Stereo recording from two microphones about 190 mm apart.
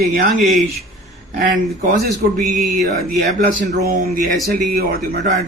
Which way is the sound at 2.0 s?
50° right (ahead or behind).